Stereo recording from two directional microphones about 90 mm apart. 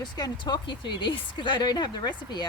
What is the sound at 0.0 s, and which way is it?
A woman's voice, 50° left (ahead or behind).